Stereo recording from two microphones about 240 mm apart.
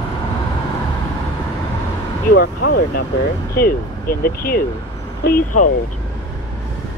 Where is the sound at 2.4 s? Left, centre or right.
Left.